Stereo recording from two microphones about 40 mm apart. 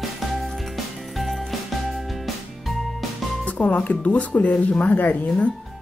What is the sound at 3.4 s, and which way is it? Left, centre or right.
Speech, left.